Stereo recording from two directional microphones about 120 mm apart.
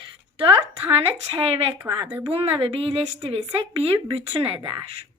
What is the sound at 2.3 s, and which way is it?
Speech, 50° right (ahead or behind).